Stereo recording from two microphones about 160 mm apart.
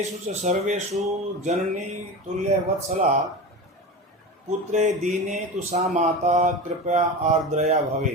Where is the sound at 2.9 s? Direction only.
50° right (ahead or behind).